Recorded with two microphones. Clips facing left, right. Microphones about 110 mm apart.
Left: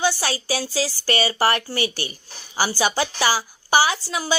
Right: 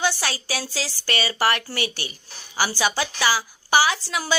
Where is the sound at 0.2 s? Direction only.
35° left (ahead or behind).